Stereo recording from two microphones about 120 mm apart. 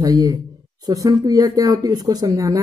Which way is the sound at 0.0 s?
30° right (ahead or behind).